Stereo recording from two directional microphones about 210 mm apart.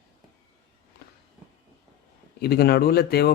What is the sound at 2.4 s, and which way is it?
Speech, 50° left (ahead or behind).